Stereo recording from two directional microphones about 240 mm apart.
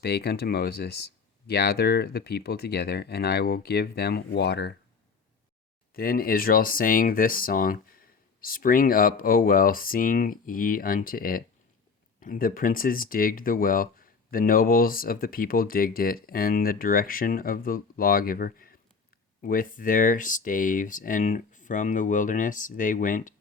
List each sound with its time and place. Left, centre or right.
0.0 s speech: left
5.9 s speech: left